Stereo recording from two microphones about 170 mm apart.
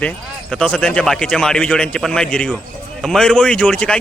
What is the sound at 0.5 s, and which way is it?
A man's voice, 5° left (ahead or behind).